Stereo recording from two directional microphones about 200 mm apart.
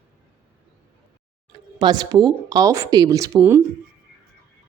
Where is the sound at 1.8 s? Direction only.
20° right (ahead or behind).